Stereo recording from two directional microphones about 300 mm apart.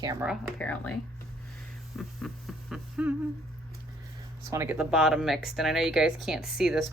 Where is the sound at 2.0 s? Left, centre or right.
Centre.